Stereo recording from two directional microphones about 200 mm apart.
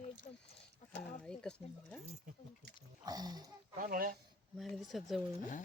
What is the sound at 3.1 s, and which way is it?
Speech, 20° right (ahead or behind).